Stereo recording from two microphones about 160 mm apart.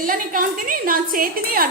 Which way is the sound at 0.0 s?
60° right (ahead or behind).